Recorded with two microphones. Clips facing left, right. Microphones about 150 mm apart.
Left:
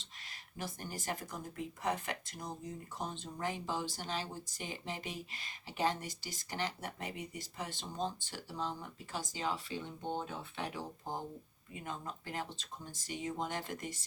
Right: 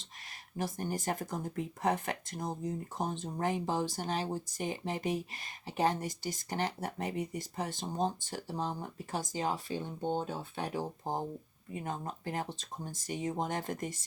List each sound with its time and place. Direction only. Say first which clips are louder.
0.5 s speech: right 8 dB; 45° right (ahead or behind)
10.0 s speech: right 6 dB; 30° right (ahead or behind)